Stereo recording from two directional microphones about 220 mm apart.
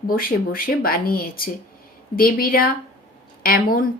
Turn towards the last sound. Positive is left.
turn(degrees=40)  # may be behind; listen again after turning